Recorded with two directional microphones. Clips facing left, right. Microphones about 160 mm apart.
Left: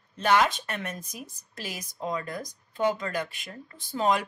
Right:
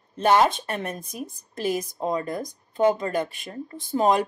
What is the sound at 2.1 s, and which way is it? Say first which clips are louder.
Speech: right 6 dB; 25° right (ahead or behind).